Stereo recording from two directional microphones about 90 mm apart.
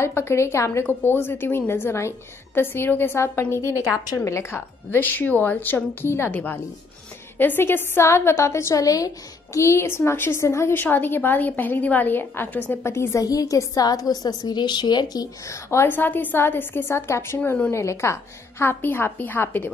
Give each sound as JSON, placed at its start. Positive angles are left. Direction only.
{"t": 0.0, "sound": "a woman's voice", "side_deg": 30}
{"t": 15.4, "sound": "a woman's voice", "side_deg": 35}